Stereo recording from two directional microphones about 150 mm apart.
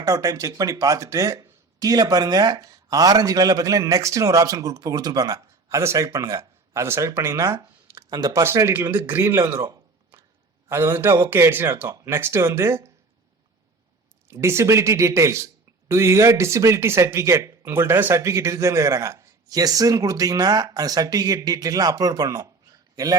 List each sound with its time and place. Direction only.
0.0 s speech: 20° right (ahead or behind)
10.7 s speech: 15° right (ahead or behind)
14.3 s speech: 20° right (ahead or behind)